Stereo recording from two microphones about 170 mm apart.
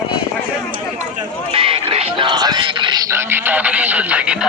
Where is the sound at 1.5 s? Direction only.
30° right (ahead or behind).